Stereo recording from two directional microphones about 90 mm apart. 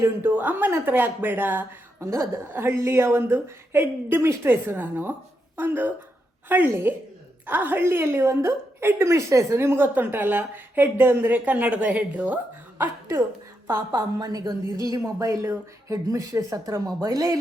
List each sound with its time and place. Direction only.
0.0 s a woman's voice: 20° right (ahead or behind)
13.9 s a woman's voice: 45° right (ahead or behind)